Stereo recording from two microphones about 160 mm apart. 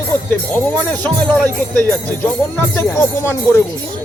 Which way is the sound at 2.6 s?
15° left (ahead or behind).